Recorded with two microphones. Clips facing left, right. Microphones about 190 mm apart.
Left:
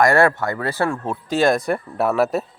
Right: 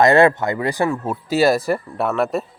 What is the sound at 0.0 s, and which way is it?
Speech, 20° right (ahead or behind).